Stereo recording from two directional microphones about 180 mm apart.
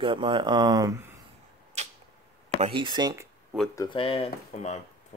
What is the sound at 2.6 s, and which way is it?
Speech, 30° right (ahead or behind).